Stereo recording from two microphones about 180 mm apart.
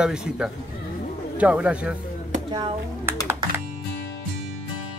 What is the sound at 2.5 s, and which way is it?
Speech, 25° right (ahead or behind).